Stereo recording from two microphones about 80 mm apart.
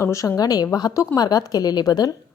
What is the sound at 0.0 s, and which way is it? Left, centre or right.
Speech, left.